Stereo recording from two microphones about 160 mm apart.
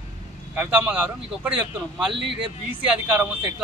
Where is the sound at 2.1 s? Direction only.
90° right.